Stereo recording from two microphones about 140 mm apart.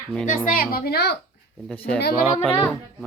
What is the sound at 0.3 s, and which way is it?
Speech, 85° left.